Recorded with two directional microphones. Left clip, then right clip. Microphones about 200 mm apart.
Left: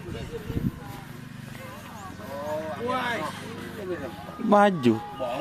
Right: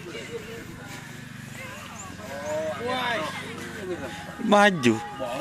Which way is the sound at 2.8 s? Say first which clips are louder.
Left 1 dB; 40° left (ahead or behind).